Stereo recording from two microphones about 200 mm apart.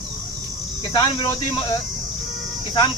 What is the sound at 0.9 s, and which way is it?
Speech, 20° left (ahead or behind).